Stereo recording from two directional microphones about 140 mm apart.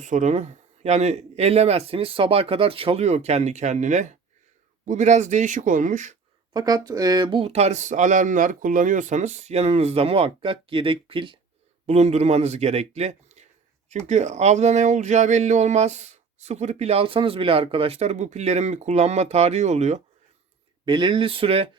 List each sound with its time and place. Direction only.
0.0 s speech: 60° right (ahead or behind)
6.5 s speech: 30° right (ahead or behind)
11.9 s speech: 50° right (ahead or behind)
20.8 s speech: 35° right (ahead or behind)